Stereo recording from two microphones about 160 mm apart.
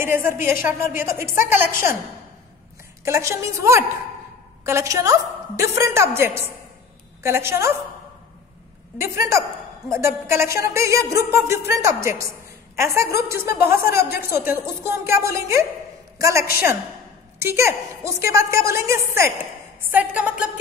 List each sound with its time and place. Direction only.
0.0 s music: 15° right (ahead or behind)
3.1 s music: 20° right (ahead or behind)
8.9 s music: 15° right (ahead or behind)
16.2 s a woman's voice: 20° right (ahead or behind)
17.4 s music: 15° right (ahead or behind)